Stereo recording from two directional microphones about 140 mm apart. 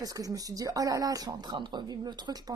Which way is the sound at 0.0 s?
25° right (ahead or behind).